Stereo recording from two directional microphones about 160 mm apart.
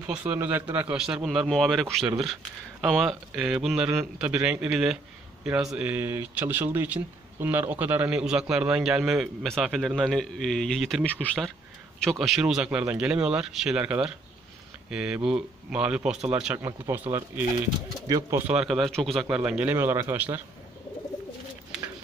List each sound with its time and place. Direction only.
0.0 s speech: 10° right (ahead or behind)
16.5 s speech: 20° right (ahead or behind)
18.5 s speech: 5° right (ahead or behind)